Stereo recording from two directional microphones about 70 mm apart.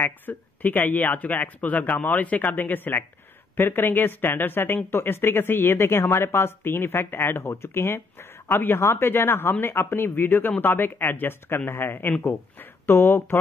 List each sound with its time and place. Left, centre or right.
0.0 s speech: left
8.5 s speech: left